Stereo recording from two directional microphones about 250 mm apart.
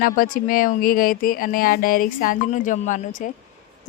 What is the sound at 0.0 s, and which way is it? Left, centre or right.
A woman's voice, left.